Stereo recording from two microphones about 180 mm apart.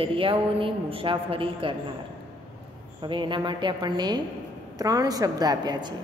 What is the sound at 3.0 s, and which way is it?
A woman's voice, 25° right (ahead or behind).